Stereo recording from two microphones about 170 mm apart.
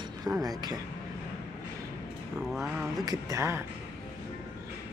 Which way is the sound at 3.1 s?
20° right (ahead or behind).